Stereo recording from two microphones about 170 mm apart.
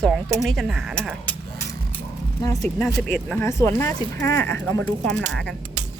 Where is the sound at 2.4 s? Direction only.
15° left (ahead or behind).